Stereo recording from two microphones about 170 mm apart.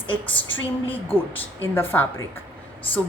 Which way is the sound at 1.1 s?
10° left (ahead or behind).